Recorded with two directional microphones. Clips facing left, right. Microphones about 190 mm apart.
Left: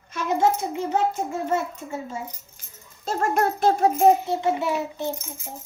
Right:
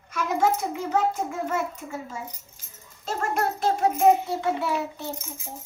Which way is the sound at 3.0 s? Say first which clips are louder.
Left 4 dB; 45° left (ahead or behind).